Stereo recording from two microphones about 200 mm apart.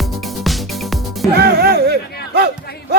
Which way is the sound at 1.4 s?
50° right (ahead or behind).